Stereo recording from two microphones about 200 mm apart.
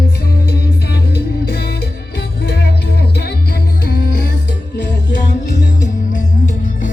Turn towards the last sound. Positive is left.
turn(degrees=40)  # may be behind; listen again after turning